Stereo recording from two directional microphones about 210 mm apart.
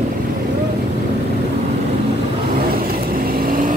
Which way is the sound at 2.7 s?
45° right (ahead or behind).